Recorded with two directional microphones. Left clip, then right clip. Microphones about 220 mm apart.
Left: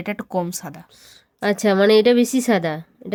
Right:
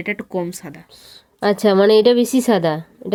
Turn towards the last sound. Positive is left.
turn(degrees=5)  # may be behind; listen again after turning